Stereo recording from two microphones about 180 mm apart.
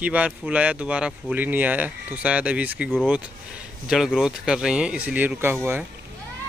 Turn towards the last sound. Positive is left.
turn(degrees=-10)  # may be behind; listen again after turning